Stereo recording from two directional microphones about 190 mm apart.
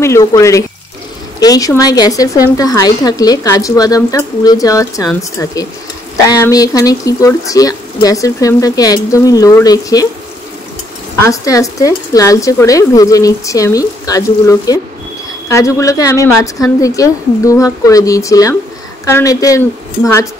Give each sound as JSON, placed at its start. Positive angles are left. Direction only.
{"t": 0.0, "sound": "speech", "side_deg": 15}
{"t": 11.2, "sound": "speech", "side_deg": 15}